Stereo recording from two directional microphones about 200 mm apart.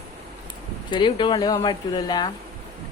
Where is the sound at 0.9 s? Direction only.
25° left (ahead or behind).